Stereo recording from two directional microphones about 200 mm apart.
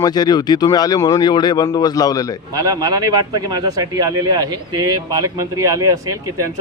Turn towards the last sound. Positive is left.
turn(degrees=-15)  # may be behind; listen again after turning